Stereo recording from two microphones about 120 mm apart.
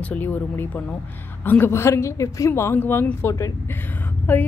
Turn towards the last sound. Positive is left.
turn(degrees=15)  # may be behind; listen again after turning